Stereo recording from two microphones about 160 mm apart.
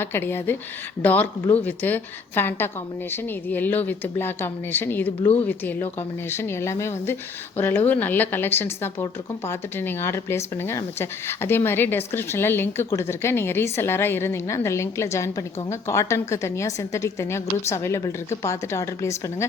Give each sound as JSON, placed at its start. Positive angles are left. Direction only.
{"t": 0.0, "sound": "speech", "side_deg": 15}